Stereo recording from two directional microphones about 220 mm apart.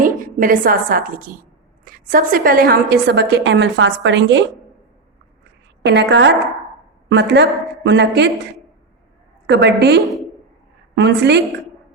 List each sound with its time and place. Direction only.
0.0 s a woman's voice: 40° right (ahead or behind); by 4.4 s 55° right (ahead or behind)
5.8 s a woman's voice: 50° right (ahead or behind)
9.5 s a woman's voice: 50° right (ahead or behind)
10.0 s a woman's voice: centre (ahead or behind)
10.9 s a woman's voice: 50° right (ahead or behind)